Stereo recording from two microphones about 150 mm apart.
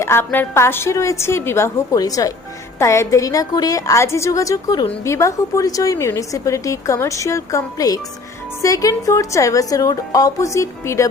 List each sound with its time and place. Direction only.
0.0 s a woman's voice: 15° left (ahead or behind)